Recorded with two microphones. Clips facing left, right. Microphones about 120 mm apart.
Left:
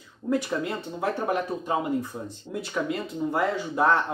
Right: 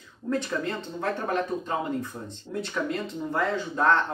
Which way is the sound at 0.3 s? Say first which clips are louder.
Left 2 dB; 15° left (ahead or behind).